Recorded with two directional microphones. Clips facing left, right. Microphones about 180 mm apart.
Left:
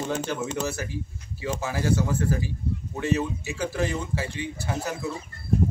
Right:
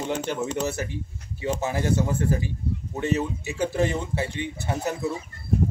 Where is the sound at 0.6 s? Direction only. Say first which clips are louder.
Right 2 dB; 20° right (ahead or behind).